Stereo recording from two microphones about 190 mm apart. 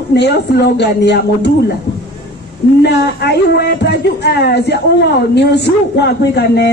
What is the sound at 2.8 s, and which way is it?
A man's voice, 60° left (ahead or behind).